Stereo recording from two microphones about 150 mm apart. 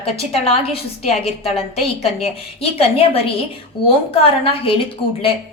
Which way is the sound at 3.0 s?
40° left (ahead or behind).